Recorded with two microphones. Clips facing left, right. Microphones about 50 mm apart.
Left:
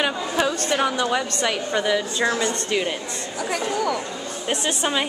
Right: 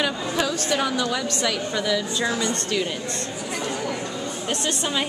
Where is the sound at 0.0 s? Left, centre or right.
Left.